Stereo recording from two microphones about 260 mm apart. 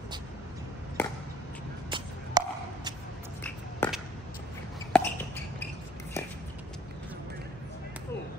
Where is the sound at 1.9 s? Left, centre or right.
Centre.